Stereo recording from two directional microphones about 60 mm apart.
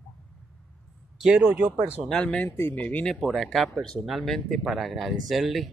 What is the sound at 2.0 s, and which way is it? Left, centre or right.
Speech, centre.